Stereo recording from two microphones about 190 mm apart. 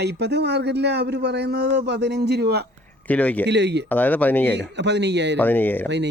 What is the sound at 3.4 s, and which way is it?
Speech, 65° right (ahead or behind).